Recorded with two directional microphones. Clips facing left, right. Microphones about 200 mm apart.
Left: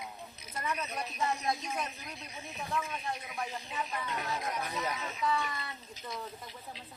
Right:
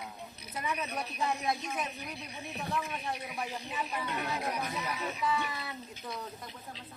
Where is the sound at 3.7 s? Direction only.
5° right (ahead or behind).